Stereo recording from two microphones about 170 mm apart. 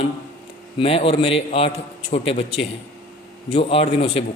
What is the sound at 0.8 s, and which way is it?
A man's voice, 35° left (ahead or behind).